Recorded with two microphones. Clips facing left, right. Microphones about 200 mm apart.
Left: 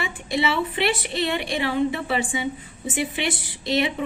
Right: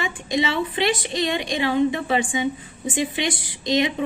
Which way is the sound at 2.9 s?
15° right (ahead or behind).